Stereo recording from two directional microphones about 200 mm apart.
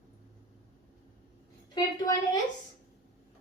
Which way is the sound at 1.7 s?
20° left (ahead or behind).